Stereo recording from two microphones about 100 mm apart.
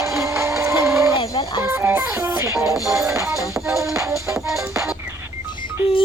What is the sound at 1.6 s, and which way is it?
Music, 25° right (ahead or behind).